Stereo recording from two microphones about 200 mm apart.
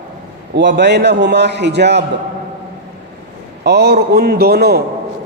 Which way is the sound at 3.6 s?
55° right (ahead or behind).